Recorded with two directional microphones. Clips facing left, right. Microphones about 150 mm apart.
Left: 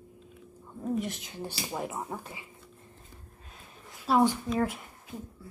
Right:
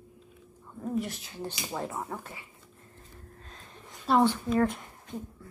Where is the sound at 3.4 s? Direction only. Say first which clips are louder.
Right 1 dB; 10° left (ahead or behind).